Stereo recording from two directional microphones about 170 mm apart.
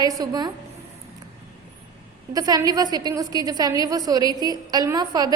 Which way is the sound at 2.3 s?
20° right (ahead or behind).